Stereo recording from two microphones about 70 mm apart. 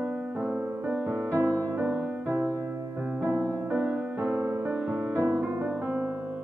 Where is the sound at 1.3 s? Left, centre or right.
Right.